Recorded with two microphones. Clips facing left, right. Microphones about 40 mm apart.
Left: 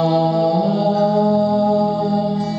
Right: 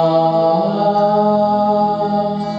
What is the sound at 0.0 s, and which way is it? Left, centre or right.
Mantra, centre.